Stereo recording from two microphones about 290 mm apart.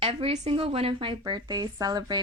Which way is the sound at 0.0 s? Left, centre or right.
Centre.